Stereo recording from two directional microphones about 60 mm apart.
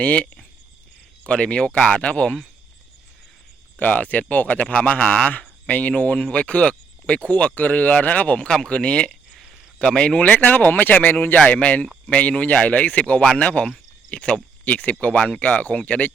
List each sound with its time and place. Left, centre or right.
0.0 s speech: left
1.3 s speech: centre
3.8 s speech: left
8.4 s speech: centre